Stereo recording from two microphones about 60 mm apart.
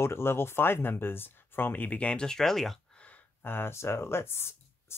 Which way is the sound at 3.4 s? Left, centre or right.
Left.